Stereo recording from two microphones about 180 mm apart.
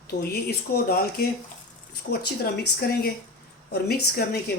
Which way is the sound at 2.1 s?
60° left (ahead or behind).